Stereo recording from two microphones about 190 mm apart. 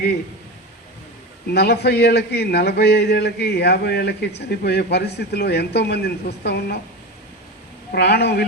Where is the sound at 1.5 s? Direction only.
60° left (ahead or behind).